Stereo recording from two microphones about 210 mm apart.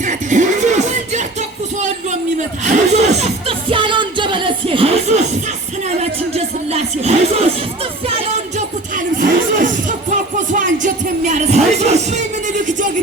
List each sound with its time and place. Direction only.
0.0 s music: 35° right (ahead or behind)